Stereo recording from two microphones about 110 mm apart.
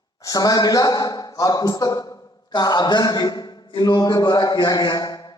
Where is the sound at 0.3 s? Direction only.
35° left (ahead or behind).